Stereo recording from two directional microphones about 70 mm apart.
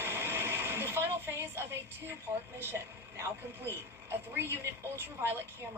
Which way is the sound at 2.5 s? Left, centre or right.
Right.